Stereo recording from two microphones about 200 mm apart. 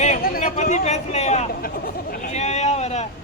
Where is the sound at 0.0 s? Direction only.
35° left (ahead or behind).